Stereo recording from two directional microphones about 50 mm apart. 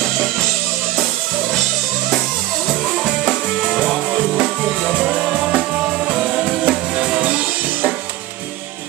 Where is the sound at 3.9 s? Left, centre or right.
Right.